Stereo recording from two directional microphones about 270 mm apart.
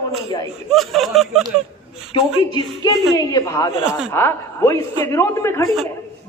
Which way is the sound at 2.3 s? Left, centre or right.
Centre.